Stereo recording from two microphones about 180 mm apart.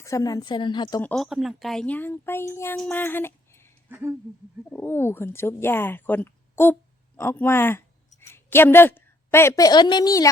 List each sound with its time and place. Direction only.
0.0 s a woman's voice: 15° left (ahead or behind)
1.0 s speech: centre (ahead or behind)
2.7 s a sound: 5° left (ahead or behind)
3.8 s speech: 15° right (ahead or behind)
4.7 s a woman's voice: 10° left (ahead or behind)